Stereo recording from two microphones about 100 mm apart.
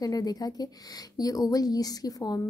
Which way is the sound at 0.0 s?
40° left (ahead or behind).